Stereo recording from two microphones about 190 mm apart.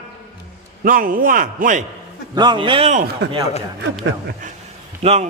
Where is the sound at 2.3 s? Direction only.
25° right (ahead or behind).